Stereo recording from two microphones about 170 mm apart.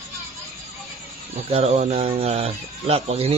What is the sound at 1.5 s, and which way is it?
Speech, 35° right (ahead or behind).